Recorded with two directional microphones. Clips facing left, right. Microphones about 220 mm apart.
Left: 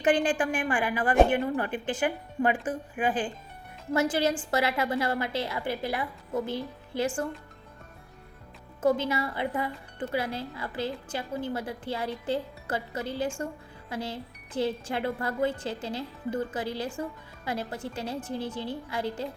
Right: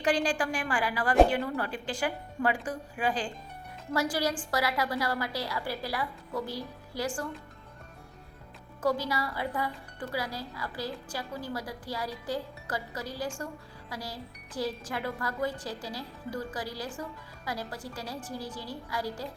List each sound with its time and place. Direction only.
0.0 s speech: 20° left (ahead or behind)
8.8 s speech: 25° left (ahead or behind)